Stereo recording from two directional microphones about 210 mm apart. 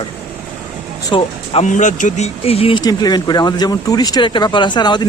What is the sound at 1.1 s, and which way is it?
Speech, 30° left (ahead or behind).